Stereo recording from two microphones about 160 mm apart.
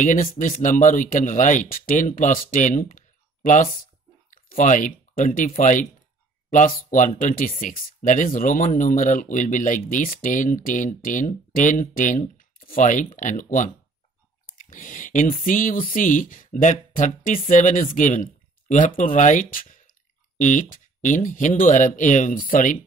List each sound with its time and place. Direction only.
0.0 s speech: 55° left (ahead or behind)